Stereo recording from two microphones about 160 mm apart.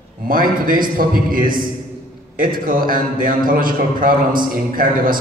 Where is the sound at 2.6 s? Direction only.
60° right (ahead or behind).